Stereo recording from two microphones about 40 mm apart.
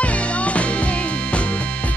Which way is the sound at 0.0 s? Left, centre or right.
Left.